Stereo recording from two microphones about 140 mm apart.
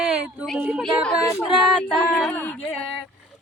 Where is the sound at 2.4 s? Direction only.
10° left (ahead or behind).